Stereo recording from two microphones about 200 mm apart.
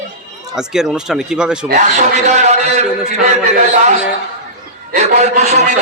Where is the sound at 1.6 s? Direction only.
35° right (ahead or behind).